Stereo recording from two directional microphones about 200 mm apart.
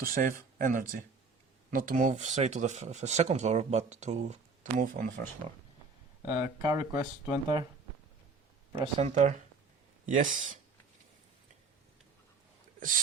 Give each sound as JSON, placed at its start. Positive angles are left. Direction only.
{"t": 0.0, "sound": "speech", "side_deg": -45}
{"t": 6.2, "sound": "speech", "side_deg": -15}
{"t": 8.7, "sound": "speech", "side_deg": -30}